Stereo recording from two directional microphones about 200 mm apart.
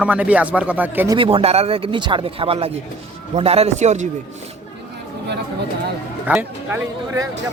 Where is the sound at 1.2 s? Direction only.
25° right (ahead or behind).